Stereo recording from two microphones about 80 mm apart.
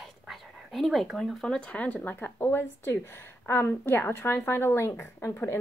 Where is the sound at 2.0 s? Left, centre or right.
Left.